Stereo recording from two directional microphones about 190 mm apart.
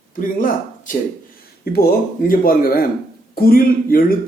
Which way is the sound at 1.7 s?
50° left (ahead or behind).